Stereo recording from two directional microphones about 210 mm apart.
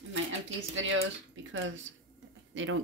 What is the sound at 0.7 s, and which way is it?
Speech, 65° right (ahead or behind).